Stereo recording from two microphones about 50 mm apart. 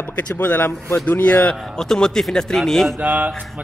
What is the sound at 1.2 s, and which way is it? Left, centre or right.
A man's voice, left.